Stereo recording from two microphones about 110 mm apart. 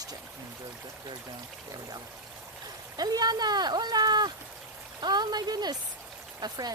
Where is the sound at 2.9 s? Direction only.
35° right (ahead or behind).